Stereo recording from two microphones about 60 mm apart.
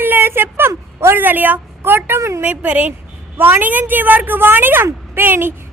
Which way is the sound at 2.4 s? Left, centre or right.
Right.